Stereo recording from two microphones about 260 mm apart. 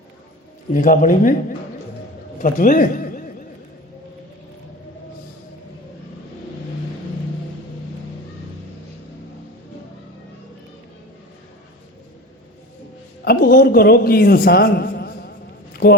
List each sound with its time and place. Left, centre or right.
0.7 s a man's voice: left
13.2 s a man's voice: left
15.7 s a sound: left